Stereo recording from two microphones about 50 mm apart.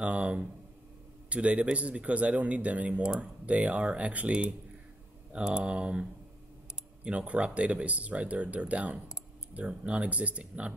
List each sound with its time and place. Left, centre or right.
0.0 s speech: right
7.1 s speech: right